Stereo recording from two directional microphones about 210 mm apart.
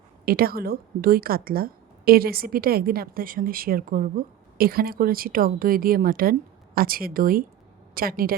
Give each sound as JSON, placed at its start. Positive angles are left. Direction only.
{"t": 0.3, "sound": "speech", "side_deg": -45}